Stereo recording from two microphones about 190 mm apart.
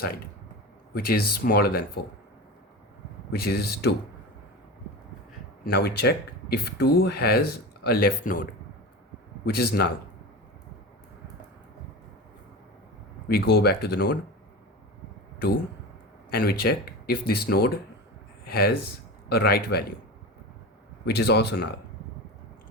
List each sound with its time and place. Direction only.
0.9 s speech: 55° left (ahead or behind)
3.3 s speech: 55° left (ahead or behind)
5.6 s speech: 55° left (ahead or behind)
9.5 s speech: 55° left (ahead or behind)
13.2 s speech: 55° left (ahead or behind)
16.3 s speech: 50° left (ahead or behind)
21.0 s speech: 60° left (ahead or behind)